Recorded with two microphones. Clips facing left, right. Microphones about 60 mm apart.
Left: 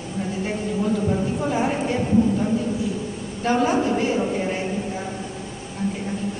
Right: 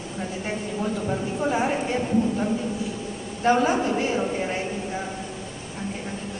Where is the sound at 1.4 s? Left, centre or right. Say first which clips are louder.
Left 1 dB; centre.